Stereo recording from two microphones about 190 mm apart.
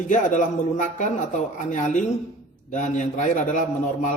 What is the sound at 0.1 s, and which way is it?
A man's voice, 40° left (ahead or behind).